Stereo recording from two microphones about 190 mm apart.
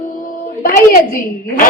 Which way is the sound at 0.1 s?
45° left (ahead or behind).